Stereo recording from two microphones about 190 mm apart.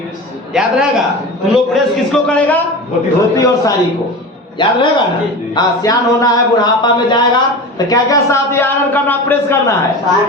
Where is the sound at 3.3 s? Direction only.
15° left (ahead or behind).